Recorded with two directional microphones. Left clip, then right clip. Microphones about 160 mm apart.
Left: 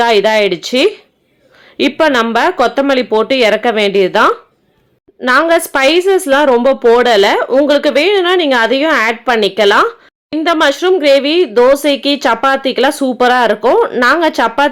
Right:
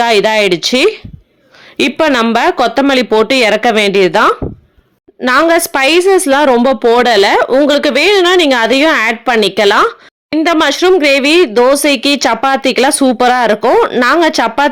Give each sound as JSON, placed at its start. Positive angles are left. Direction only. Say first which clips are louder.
{"t": 0.0, "sound": "a woman's voice", "louder": "even", "side_deg": -35}